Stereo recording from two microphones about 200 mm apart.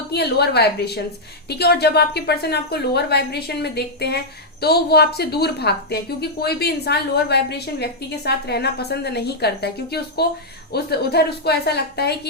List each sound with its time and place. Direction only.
0.1 s a woman's voice: 55° left (ahead or behind)